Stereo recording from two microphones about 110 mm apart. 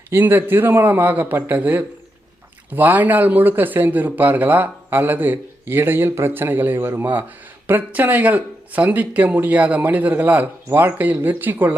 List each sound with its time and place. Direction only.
0.1 s speech: 20° right (ahead or behind)